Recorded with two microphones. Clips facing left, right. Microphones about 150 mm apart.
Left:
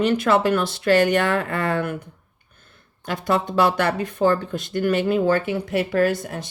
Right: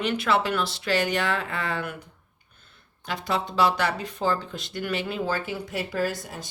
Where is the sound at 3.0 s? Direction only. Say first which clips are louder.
Left 6 dB; 50° left (ahead or behind).